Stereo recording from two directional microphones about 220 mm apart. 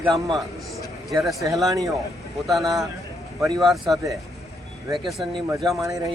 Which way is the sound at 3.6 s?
Centre (ahead or behind).